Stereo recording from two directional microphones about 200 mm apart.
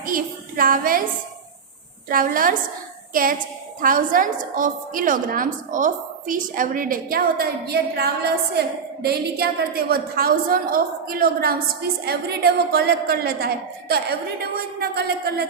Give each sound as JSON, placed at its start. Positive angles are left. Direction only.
{"t": 0.0, "sound": "a woman's voice", "side_deg": -45}
{"t": 2.0, "sound": "a woman's voice", "side_deg": -45}